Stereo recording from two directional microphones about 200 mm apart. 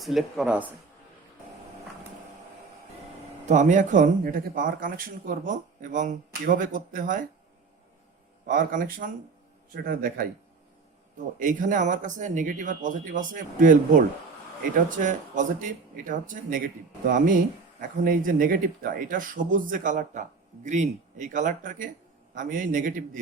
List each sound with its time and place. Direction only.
0.0 s speech: centre (ahead or behind)
3.4 s speech: 40° right (ahead or behind)
8.4 s speech: 40° right (ahead or behind)
11.3 s speech: 40° right (ahead or behind)